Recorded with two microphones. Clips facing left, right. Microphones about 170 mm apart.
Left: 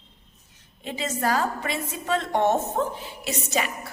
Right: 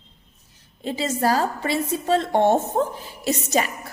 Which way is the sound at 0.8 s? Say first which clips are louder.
Right 5 dB; 35° right (ahead or behind).